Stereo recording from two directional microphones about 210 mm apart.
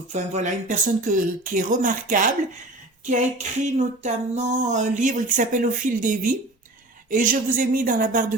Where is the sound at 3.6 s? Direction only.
35° right (ahead or behind).